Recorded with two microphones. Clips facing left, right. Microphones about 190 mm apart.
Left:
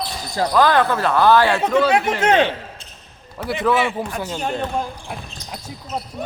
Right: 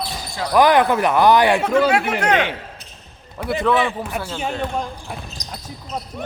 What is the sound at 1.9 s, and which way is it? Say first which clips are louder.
Speech: left 1 dB; 20° left (ahead or behind).